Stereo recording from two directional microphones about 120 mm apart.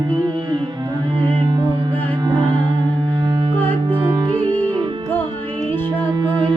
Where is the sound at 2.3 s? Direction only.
40° right (ahead or behind).